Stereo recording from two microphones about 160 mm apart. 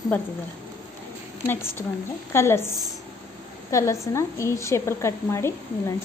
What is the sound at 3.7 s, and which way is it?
A woman's voice, 20° left (ahead or behind).